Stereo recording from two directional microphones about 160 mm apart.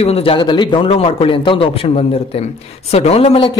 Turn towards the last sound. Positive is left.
turn(degrees=35)  # may be behind; listen again after turning